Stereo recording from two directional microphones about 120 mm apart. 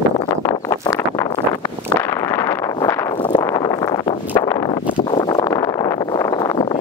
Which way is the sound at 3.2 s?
40° left (ahead or behind).